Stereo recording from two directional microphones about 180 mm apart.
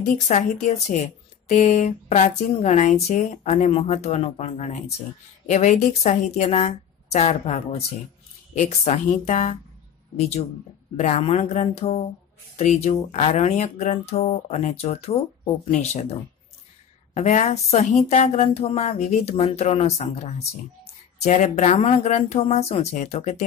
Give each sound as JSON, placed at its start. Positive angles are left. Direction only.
{"t": 0.3, "sound": "speech", "side_deg": 40}
{"t": 11.0, "sound": "speech", "side_deg": 40}